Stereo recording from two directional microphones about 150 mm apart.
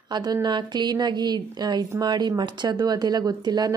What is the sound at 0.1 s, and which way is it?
A woman's voice, 25° right (ahead or behind).